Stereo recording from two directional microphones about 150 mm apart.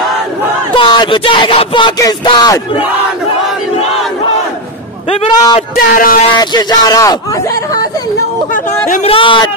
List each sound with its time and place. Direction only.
0.7 s speech: 30° left (ahead or behind)
5.3 s speech: 25° left (ahead or behind)
5.9 s speech: 70° left (ahead or behind)
6.3 s speech: 30° left (ahead or behind)
9.0 s speech: 35° left (ahead or behind)